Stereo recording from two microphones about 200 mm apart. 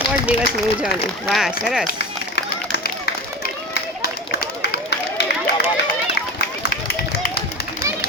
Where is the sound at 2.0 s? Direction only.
55° left (ahead or behind).